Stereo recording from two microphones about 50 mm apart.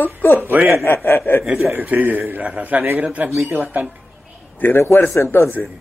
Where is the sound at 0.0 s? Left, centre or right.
Left.